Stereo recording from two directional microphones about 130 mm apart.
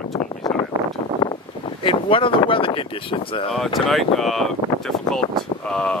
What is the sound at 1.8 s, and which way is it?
Speech, 45° left (ahead or behind).